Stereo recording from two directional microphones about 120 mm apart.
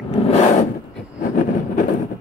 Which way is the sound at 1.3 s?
90° left.